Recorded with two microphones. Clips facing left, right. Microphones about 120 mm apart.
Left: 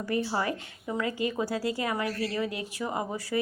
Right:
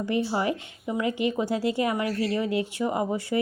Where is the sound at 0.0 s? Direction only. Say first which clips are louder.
Right 3 dB; 20° right (ahead or behind).